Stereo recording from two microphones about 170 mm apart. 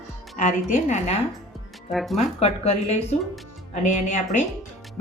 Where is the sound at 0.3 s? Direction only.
45° left (ahead or behind).